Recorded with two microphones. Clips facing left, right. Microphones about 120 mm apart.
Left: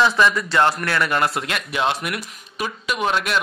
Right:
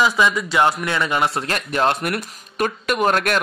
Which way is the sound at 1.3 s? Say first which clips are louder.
Right 2 dB; 40° right (ahead or behind).